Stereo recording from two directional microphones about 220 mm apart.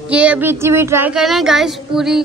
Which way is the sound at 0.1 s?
5° right (ahead or behind).